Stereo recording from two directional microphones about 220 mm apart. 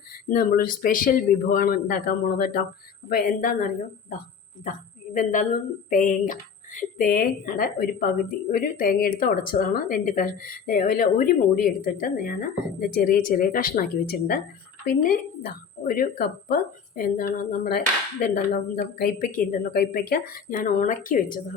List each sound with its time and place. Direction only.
0.3 s a woman's voice: 40° left (ahead or behind)